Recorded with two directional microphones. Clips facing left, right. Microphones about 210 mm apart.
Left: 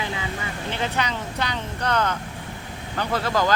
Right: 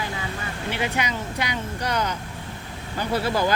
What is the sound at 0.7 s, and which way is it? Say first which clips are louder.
Speech: right 1 dB; 10° right (ahead or behind).